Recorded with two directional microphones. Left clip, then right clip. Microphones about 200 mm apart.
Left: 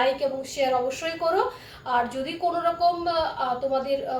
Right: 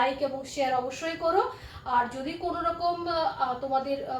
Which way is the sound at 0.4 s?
25° left (ahead or behind).